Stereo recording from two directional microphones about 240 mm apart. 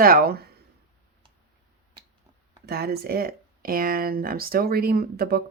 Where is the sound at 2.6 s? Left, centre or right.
Right.